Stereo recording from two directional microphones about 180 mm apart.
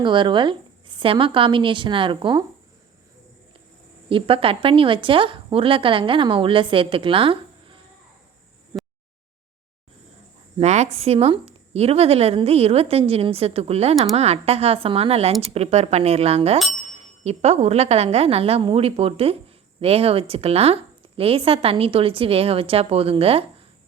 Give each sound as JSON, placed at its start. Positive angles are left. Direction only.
{"t": 0.0, "sound": "a woman's voice", "side_deg": -25}
{"t": 4.1, "sound": "a woman's voice", "side_deg": -30}
{"t": 10.6, "sound": "a woman's voice", "side_deg": -40}